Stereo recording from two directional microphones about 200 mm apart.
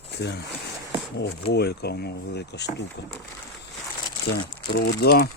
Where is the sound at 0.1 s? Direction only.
55° left (ahead or behind).